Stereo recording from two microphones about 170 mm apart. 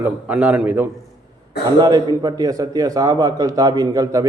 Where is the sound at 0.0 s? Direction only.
10° right (ahead or behind).